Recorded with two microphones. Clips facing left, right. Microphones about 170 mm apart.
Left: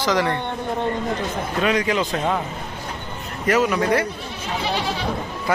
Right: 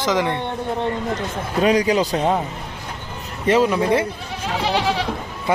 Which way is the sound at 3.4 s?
30° right (ahead or behind).